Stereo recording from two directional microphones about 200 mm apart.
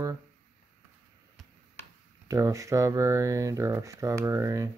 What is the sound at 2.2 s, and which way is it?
Speech, 15° right (ahead or behind).